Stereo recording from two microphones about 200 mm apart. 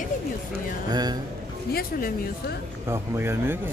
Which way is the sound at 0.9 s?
20° right (ahead or behind).